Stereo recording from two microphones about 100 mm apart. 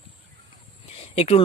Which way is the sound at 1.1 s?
90° left.